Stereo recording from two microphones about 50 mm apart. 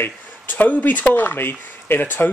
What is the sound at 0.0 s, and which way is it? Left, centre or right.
Speech, left.